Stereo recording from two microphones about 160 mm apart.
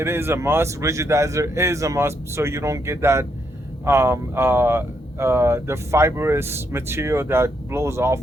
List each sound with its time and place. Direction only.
0.0 s speech: 15° right (ahead or behind)